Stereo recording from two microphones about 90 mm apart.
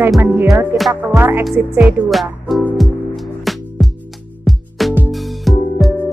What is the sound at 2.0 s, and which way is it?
Speech, centre (ahead or behind).